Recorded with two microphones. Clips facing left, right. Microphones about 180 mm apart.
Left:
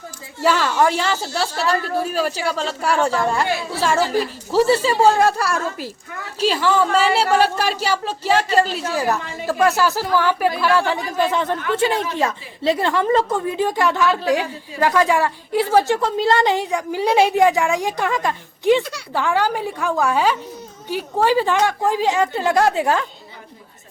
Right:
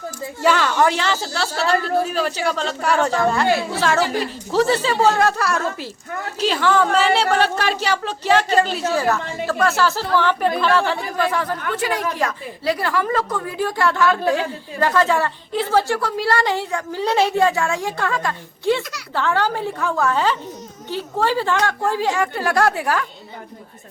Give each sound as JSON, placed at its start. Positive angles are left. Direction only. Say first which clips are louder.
{"t": 0.4, "sound": "a woman's voice", "louder": "even", "side_deg": 0}
{"t": 6.5, "sound": "a woman's voice", "louder": "even", "side_deg": 5}
{"t": 9.0, "sound": "a woman's voice", "louder": "left 2 dB", "side_deg": 15}
{"t": 18.8, "sound": "a woman's voice", "louder": "left 5 dB", "side_deg": 30}
{"t": 19.1, "sound": "a woman's voice", "louder": "left 1 dB", "side_deg": 10}